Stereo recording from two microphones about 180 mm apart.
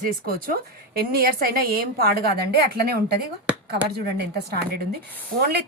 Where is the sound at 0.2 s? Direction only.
55° right (ahead or behind).